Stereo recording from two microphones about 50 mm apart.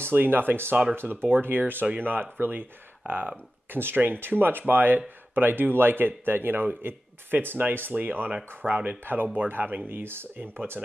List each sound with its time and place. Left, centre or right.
0.0 s speech: right